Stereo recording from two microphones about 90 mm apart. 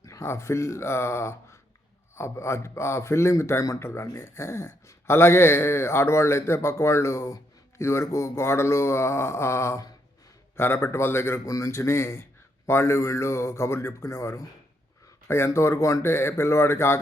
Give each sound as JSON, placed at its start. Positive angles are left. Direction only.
{"t": 0.0, "sound": "a man's voice", "side_deg": 35}